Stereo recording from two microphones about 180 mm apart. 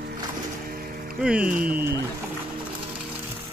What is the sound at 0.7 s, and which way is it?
Music, 55° right (ahead or behind).